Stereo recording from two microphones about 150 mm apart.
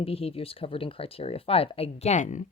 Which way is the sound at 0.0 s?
40° left (ahead or behind).